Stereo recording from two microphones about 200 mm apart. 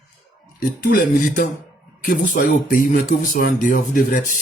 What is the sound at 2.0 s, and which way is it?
Speech, 40° left (ahead or behind).